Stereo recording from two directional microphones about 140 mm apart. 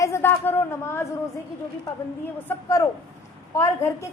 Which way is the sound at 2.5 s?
15° left (ahead or behind).